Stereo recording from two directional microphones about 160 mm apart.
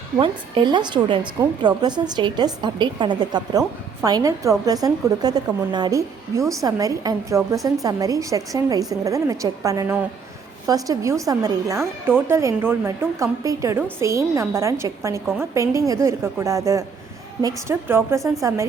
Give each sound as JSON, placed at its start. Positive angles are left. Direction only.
{"t": 0.2, "sound": "a woman's voice", "side_deg": -30}